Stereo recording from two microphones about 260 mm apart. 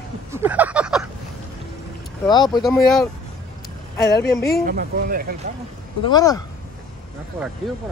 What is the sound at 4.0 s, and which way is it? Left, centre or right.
Speech, centre.